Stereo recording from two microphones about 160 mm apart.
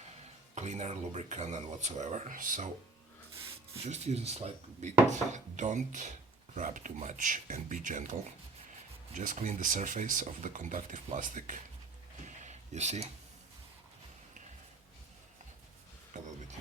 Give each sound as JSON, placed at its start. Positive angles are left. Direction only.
{"t": 0.5, "sound": "speech", "side_deg": -45}
{"t": 3.8, "sound": "speech", "side_deg": -45}
{"t": 12.2, "sound": "a sound", "side_deg": -45}